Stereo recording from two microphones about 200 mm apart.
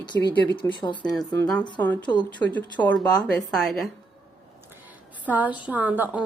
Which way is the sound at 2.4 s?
10° left (ahead or behind).